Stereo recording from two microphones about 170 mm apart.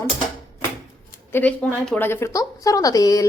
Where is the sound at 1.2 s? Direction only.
10° left (ahead or behind).